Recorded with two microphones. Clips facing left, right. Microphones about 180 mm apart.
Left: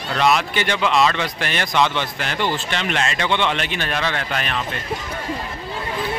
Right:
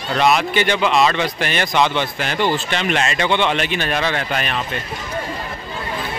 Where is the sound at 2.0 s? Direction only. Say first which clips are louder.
Right 3 dB; 15° right (ahead or behind).